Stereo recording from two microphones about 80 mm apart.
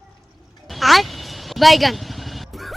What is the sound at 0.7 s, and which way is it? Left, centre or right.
Vehicle, centre.